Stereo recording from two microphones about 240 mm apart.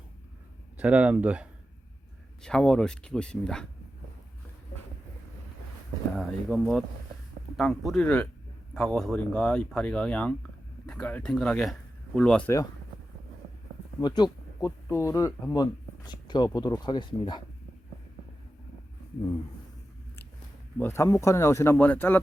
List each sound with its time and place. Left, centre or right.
0.8 s speech: centre
6.1 s speech: centre
14.0 s speech: centre
20.7 s speech: centre